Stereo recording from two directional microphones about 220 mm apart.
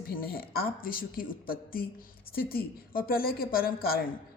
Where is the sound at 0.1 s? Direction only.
45° left (ahead or behind).